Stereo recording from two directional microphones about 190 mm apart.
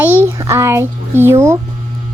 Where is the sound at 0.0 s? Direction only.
10° right (ahead or behind).